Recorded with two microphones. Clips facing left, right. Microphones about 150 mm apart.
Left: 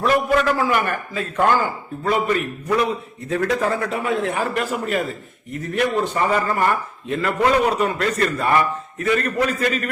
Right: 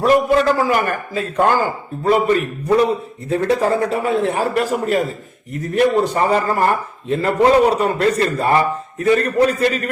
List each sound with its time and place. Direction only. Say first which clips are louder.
0.3 s a man's voice: right 3 dB; 35° right (ahead or behind)